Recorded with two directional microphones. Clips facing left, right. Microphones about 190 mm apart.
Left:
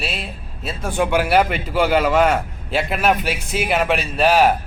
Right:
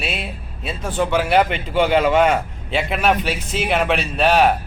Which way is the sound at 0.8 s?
10° left (ahead or behind).